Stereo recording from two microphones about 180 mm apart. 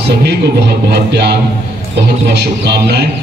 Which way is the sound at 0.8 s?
65° right (ahead or behind).